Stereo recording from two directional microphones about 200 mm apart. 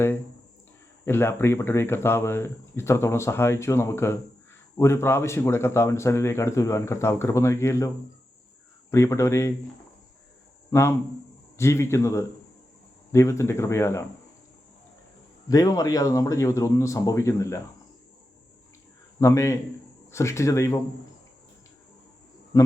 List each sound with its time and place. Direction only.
1.0 s speech: 10° left (ahead or behind)
8.9 s speech: 15° left (ahead or behind)
10.7 s speech: 15° left (ahead or behind)
15.4 s speech: 15° left (ahead or behind)
19.2 s speech: 15° left (ahead or behind)